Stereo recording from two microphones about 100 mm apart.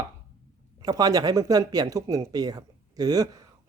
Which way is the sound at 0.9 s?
40° right (ahead or behind).